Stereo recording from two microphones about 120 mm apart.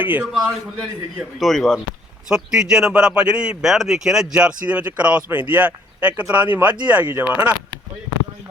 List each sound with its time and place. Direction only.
0.0 s speech: 10° right (ahead or behind)
1.4 s a man's voice: centre (ahead or behind)